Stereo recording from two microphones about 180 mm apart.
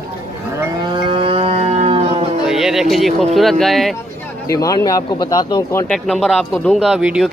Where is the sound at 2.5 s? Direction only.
Centre (ahead or behind).